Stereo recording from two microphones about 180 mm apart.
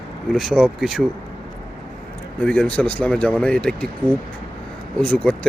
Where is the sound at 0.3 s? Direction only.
Centre (ahead or behind).